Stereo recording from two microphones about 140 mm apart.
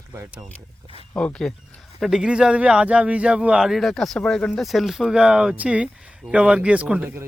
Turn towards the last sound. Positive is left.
turn(degrees=-10)  # may be behind; listen again after turning